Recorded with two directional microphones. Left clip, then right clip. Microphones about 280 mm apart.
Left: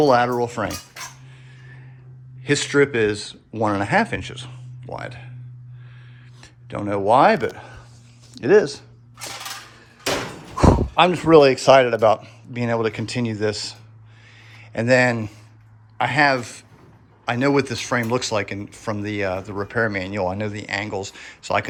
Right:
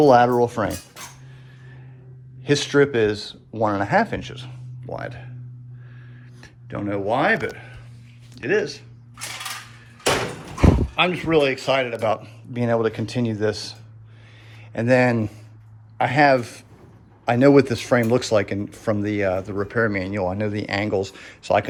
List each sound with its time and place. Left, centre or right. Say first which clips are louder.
0.0 s speech: right 2 dB; centre
2.4 s speech: even; centre
6.4 s a sound: left 1 dB; centre
7.1 s speech: left 6 dB; centre
8.4 s a sound: left 4 dB; centre
10.5 s dog: left 5 dB; centre
11.7 s speech: left 7 dB; centre